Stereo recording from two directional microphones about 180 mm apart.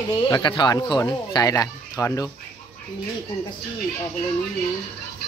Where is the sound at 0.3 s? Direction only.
25° left (ahead or behind).